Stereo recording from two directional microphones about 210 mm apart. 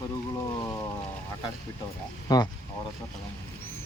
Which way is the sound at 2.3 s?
15° left (ahead or behind).